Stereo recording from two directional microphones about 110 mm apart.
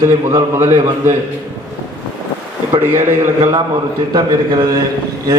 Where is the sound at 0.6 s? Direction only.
20° right (ahead or behind).